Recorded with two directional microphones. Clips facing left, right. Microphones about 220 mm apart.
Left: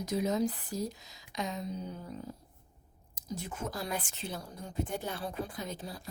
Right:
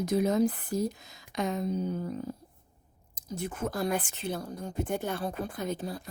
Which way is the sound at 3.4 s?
55° right (ahead or behind).